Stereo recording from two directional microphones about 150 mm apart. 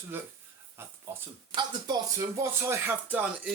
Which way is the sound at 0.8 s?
15° right (ahead or behind).